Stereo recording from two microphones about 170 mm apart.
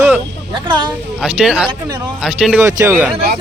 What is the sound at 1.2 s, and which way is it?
Speech, 5° right (ahead or behind).